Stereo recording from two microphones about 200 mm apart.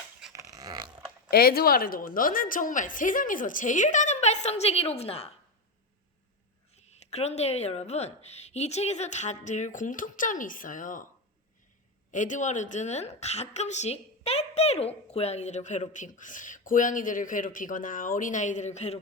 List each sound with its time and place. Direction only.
0.5 s a sound: 20° right (ahead or behind)
1.3 s a woman's voice: 50° left (ahead or behind); by 5.3 s 30° left (ahead or behind)
6.7 s a woman's voice: 35° left (ahead or behind)
12.1 s a woman's voice: 40° left (ahead or behind)